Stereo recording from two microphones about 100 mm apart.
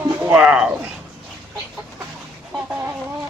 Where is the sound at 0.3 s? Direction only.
10° right (ahead or behind).